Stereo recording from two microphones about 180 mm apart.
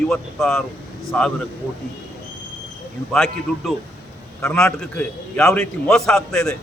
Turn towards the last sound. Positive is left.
turn(degrees=5)  # may be behind; listen again after turning